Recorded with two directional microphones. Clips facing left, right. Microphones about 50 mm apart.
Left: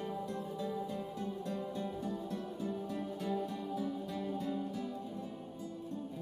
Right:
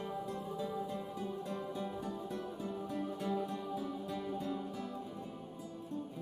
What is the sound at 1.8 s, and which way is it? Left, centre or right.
Music, centre.